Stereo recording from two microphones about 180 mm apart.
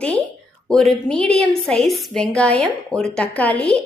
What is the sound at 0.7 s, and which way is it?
A woman's voice, 5° left (ahead or behind).